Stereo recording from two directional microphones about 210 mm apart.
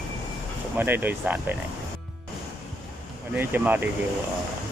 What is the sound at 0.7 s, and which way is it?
Speech, 10° right (ahead or behind).